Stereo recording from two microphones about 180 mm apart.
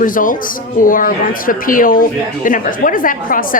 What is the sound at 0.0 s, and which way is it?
Speech, 50° left (ahead or behind).